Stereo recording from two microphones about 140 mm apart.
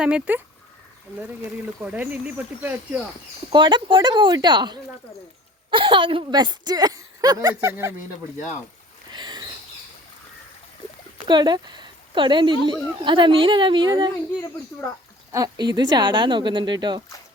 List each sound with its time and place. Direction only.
0.0 s speech: 10° right (ahead or behind)
3.5 s a woman's voice: 35° right (ahead or behind); by 7.9 s 20° right (ahead or behind)
9.0 s a sound: 30° right (ahead or behind)
11.3 s speech: 30° right (ahead or behind)
15.3 s speech: 25° right (ahead or behind)